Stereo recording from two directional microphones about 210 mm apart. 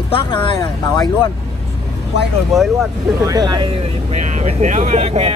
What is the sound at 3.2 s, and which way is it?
Speech, 20° right (ahead or behind).